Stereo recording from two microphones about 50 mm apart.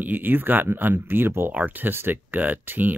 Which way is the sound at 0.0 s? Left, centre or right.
Right.